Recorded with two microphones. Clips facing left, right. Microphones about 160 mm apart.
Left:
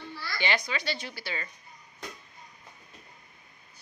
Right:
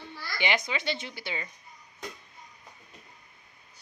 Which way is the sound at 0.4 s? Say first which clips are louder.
Right 1 dB; 20° right (ahead or behind).